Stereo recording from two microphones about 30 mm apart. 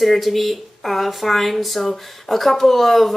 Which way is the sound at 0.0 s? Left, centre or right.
Centre.